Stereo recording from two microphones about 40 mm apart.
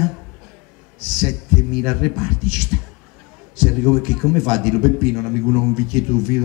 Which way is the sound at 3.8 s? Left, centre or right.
Centre.